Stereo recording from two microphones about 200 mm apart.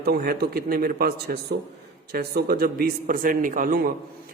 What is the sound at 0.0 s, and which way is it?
Speech, 50° right (ahead or behind).